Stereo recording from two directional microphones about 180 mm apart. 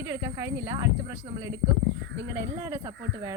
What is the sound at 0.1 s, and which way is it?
Speech, 15° right (ahead or behind).